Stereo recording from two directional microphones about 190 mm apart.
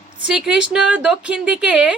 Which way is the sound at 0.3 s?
5° right (ahead or behind).